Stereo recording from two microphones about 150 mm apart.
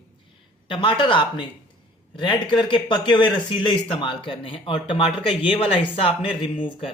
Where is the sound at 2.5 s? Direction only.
30° left (ahead or behind).